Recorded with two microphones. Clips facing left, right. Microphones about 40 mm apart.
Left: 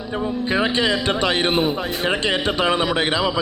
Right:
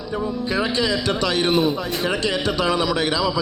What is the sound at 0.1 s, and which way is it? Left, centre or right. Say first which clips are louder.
A man's voice: left 2 dB; left.